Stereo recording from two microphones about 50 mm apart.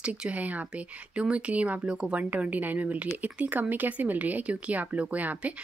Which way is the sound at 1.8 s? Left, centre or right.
Centre.